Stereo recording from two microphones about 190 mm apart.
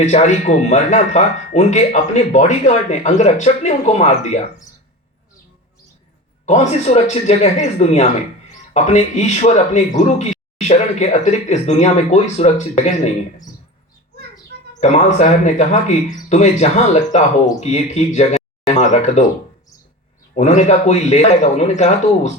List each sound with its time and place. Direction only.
0.0 s speech: 35° left (ahead or behind)
6.4 s speech: 35° left (ahead or behind)
14.8 s speech: 35° left (ahead or behind)
20.3 s speech: 35° left (ahead or behind)